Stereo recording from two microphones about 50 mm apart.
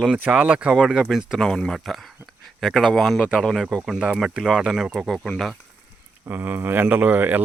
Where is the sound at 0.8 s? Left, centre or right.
Centre.